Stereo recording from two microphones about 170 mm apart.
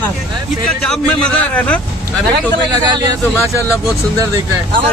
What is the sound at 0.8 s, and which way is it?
Speech, 5° left (ahead or behind).